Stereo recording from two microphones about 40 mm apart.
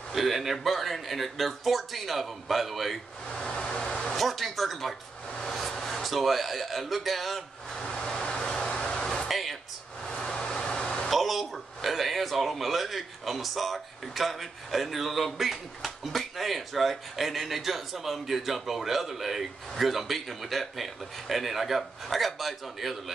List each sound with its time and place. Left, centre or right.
0.1 s a man's voice: centre
3.3 s vehicle: left
4.1 s a man's voice: centre
7.7 s vehicle: centre
8.2 s vehicle: left
8.5 s a sound: centre
9.3 s a sound: centre
10.0 s vehicle: centre
11.1 s a man's voice: centre